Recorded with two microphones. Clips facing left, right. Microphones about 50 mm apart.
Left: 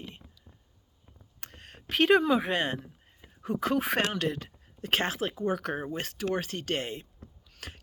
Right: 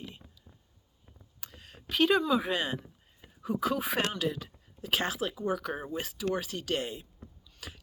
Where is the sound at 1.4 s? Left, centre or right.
Left.